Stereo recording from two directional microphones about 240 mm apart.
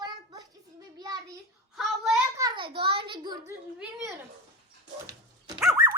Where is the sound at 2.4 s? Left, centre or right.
Centre.